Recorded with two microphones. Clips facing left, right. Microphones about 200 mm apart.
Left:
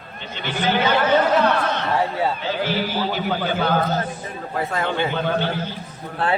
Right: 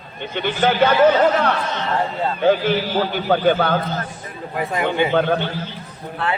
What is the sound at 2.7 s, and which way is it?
Speech, 55° right (ahead or behind).